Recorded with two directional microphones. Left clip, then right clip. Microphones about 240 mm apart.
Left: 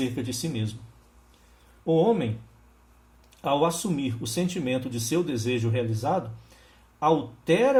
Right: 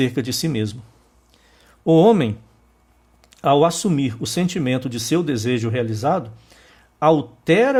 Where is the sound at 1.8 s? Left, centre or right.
Right.